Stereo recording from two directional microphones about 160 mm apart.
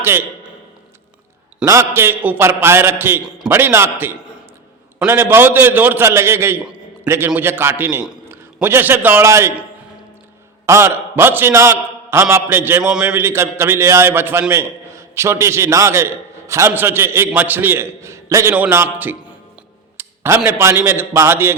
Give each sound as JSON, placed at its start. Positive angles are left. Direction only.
{"t": 0.0, "sound": "a man's voice", "side_deg": -15}
{"t": 1.6, "sound": "a man's voice", "side_deg": -15}
{"t": 10.7, "sound": "a man's voice", "side_deg": -15}